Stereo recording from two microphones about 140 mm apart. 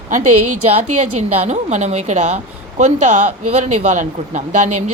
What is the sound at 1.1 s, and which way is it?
Speech, 55° right (ahead or behind).